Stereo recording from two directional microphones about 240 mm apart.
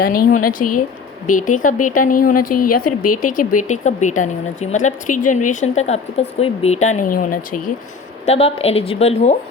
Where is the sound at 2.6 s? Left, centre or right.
Left.